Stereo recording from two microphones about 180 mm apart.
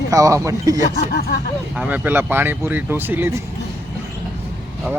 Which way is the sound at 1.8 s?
10° right (ahead or behind).